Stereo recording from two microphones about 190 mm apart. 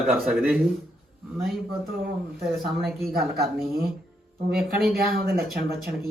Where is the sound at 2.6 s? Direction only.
Centre (ahead or behind).